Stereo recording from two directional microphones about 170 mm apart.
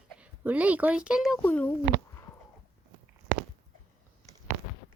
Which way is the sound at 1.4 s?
10° left (ahead or behind).